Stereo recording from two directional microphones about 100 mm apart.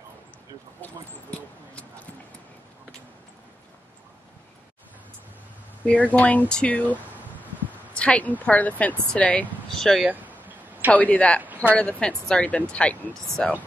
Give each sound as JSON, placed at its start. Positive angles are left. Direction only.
{"t": 5.9, "sound": "speech", "side_deg": 15}
{"t": 9.7, "sound": "speech", "side_deg": 5}
{"t": 10.0, "sound": "a sound", "side_deg": -15}
{"t": 10.9, "sound": "speech", "side_deg": 15}
{"t": 11.4, "sound": "a sound", "side_deg": -20}
{"t": 11.7, "sound": "speech", "side_deg": 15}